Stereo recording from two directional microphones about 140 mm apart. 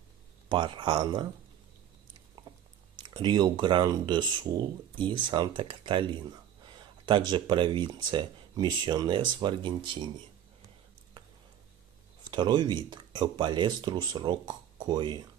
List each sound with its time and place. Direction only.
0.5 s speech: 35° right (ahead or behind)
3.0 s speech: 35° right (ahead or behind)
12.3 s speech: 30° right (ahead or behind)